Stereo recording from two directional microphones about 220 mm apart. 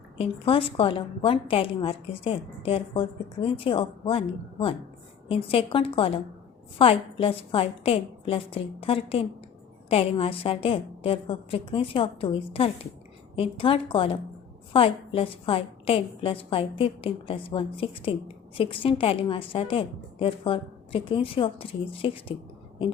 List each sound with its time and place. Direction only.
0.2 s a woman's voice: 25° left (ahead or behind)